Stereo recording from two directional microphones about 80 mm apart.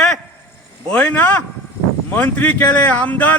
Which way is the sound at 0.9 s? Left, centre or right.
Centre.